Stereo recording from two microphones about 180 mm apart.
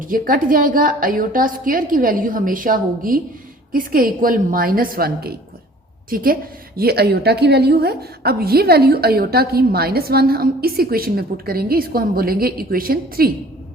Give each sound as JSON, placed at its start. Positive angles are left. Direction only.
{"t": 0.0, "sound": "a woman's voice", "side_deg": -50}